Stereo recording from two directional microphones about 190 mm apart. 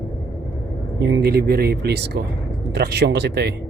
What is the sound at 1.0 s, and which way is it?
Speech, 60° right (ahead or behind).